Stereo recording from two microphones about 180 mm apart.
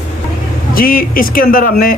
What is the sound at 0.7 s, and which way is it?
Speech, 55° left (ahead or behind).